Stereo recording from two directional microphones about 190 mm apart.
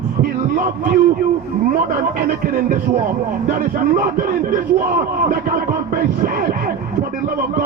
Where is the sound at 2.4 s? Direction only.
50° right (ahead or behind).